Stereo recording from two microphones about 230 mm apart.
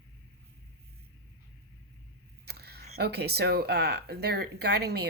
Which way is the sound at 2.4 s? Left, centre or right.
Right.